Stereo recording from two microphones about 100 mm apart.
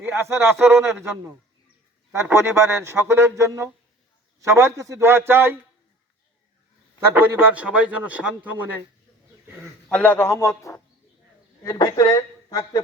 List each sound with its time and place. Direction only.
0.2 s speech: 25° right (ahead or behind)
2.3 s speech: 25° right (ahead or behind)
7.1 s a man's voice: 20° right (ahead or behind)
9.9 s a man's voice: 15° left (ahead or behind)
11.9 s speech: 35° left (ahead or behind)